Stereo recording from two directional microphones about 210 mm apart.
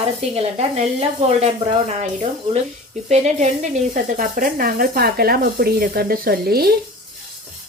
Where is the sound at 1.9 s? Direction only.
30° right (ahead or behind); by 6.7 s 50° right (ahead or behind).